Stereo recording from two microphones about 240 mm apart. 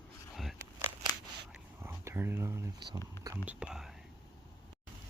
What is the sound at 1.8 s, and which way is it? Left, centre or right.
Speech, centre.